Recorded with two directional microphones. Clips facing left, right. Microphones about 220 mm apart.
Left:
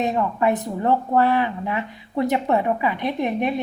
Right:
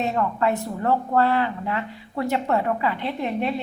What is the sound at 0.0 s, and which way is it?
A woman's voice, 15° left (ahead or behind).